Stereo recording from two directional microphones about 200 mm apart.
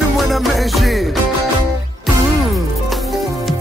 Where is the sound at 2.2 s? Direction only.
Centre (ahead or behind).